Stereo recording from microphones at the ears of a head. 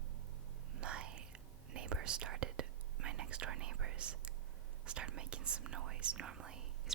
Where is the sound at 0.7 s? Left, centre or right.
Right.